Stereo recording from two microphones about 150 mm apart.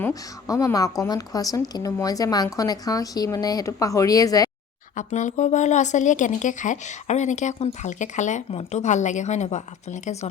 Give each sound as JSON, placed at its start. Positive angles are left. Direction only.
{"t": 0.0, "sound": "a woman's voice", "side_deg": 20}
{"t": 4.9, "sound": "speech", "side_deg": 55}